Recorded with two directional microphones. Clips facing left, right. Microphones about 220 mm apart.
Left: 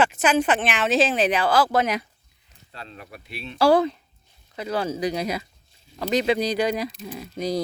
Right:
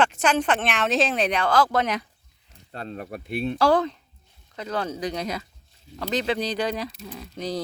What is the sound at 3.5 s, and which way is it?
Speech, 10° left (ahead or behind).